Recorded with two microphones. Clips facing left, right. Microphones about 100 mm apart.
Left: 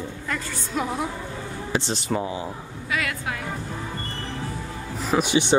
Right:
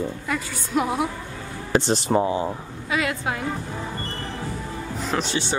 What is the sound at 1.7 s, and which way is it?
Music, 50° right (ahead or behind).